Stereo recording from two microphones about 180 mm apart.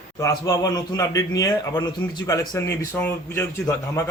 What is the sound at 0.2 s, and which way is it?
A man's voice, 20° left (ahead or behind).